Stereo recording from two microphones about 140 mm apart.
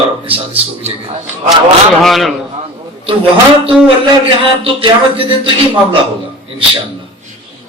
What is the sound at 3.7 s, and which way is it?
A man's voice, 40° right (ahead or behind).